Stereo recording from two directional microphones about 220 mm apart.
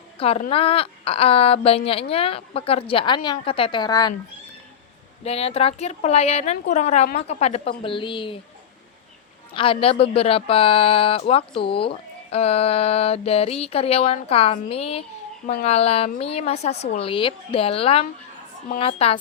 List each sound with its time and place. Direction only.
0.2 s speech: 25° left (ahead or behind)
5.2 s speech: 25° left (ahead or behind)
9.6 s speech: 25° left (ahead or behind)